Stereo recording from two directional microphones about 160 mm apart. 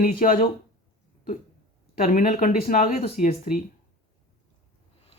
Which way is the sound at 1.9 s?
55° left (ahead or behind).